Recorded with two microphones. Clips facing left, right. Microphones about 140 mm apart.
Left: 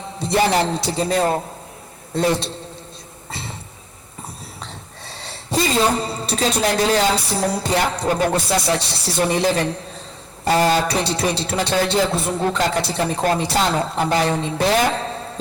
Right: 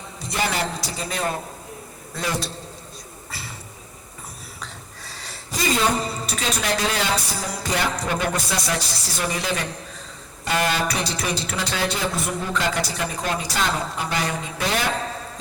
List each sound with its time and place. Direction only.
0.2 s music: 30° left (ahead or behind)
4.6 s a woman's voice: 30° left (ahead or behind)
7.5 s music: 30° left (ahead or behind)
13.2 s speech: 30° left (ahead or behind)
14.1 s music: 30° left (ahead or behind)